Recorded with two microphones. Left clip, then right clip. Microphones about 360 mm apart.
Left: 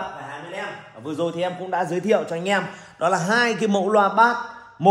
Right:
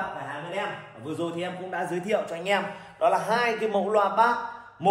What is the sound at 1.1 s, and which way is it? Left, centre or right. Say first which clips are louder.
A man's voice: left 7 dB; centre.